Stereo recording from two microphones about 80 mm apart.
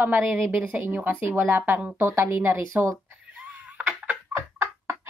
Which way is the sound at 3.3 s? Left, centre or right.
Centre.